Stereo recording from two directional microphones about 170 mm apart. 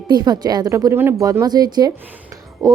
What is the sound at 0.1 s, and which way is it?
A woman's voice, 25° right (ahead or behind).